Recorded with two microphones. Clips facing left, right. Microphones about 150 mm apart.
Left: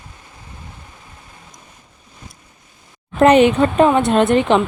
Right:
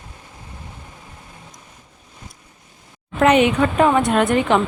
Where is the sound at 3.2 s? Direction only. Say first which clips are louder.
Left 4 dB; 35° left (ahead or behind).